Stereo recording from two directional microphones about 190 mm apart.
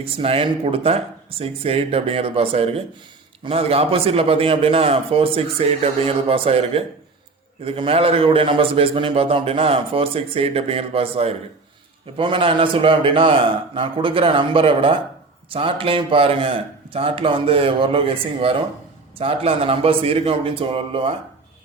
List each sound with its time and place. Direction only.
0.0 s a man's voice: 30° right (ahead or behind)